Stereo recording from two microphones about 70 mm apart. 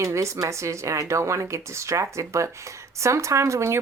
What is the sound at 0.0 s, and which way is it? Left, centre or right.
Speech, right.